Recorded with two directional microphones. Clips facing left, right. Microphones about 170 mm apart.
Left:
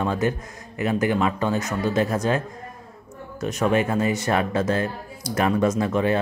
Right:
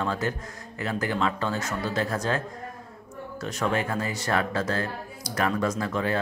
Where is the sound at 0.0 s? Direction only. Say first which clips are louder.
Left 5 dB; 15° left (ahead or behind).